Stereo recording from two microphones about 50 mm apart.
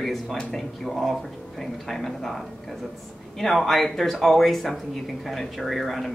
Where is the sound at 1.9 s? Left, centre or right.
Centre.